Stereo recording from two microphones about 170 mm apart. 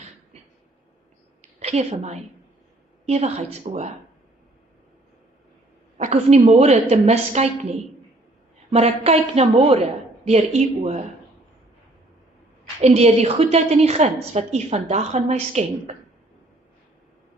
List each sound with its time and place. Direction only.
1.4 s a sound: 40° right (ahead or behind)
3.1 s a woman's voice: 40° right (ahead or behind)
6.0 s a woman's voice: 40° right (ahead or behind)
8.7 s a woman's voice: 35° right (ahead or behind)
12.8 s a woman's voice: 40° right (ahead or behind)